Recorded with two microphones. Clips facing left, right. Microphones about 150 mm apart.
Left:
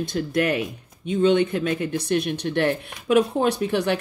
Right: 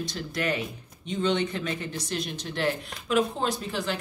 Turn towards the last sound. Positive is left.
turn(degrees=65)  # may be behind; listen again after turning